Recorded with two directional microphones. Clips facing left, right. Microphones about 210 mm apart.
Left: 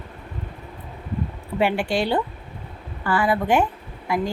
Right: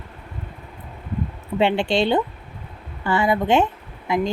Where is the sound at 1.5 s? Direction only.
25° right (ahead or behind).